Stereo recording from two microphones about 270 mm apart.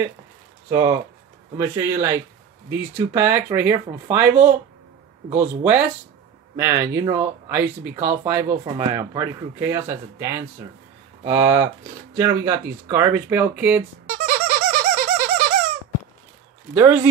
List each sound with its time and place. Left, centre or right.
0.7 s speech: centre
14.1 s squeak: right
16.7 s speech: centre